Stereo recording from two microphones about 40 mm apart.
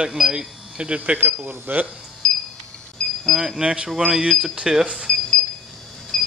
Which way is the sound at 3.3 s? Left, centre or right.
Centre.